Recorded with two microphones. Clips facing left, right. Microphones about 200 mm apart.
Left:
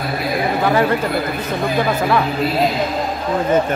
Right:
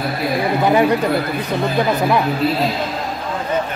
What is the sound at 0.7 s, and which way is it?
Speech, 15° right (ahead or behind).